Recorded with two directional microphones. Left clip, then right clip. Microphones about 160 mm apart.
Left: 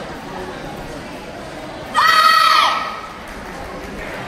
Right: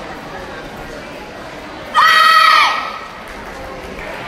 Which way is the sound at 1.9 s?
Centre (ahead or behind).